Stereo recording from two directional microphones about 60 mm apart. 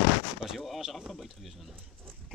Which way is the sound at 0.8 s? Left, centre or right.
Centre.